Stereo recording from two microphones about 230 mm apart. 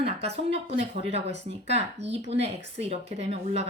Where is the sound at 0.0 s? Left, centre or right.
Right.